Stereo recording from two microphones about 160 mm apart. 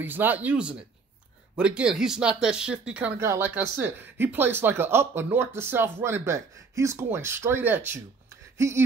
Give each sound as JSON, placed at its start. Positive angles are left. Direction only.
{"t": 0.0, "sound": "speech", "side_deg": -10}